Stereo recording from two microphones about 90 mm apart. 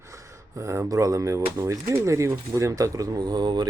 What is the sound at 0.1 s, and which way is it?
Speech, 35° right (ahead or behind).